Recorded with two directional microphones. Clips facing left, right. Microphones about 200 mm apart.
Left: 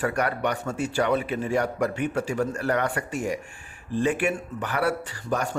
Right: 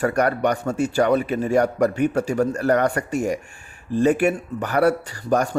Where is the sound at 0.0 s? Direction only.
45° right (ahead or behind).